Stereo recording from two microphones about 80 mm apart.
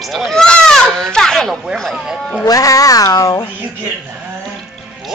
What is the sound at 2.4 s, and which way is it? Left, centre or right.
Speech, left.